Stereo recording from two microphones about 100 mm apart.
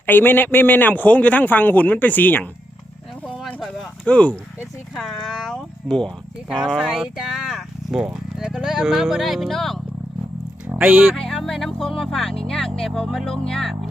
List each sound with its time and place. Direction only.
0.0 s speech: 20° left (ahead or behind)
3.4 s a sound: centre (ahead or behind)
4.9 s speech: 5° left (ahead or behind)
10.8 s speech: 10° right (ahead or behind)
11.1 s speech: centre (ahead or behind)